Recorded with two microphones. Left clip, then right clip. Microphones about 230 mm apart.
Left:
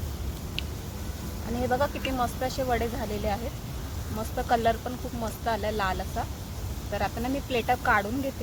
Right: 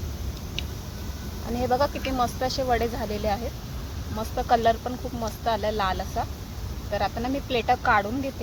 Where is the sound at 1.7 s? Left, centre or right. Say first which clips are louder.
Right 3 dB; right.